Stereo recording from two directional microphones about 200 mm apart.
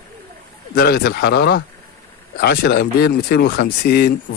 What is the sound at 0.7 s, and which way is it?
A man's voice, 50° left (ahead or behind).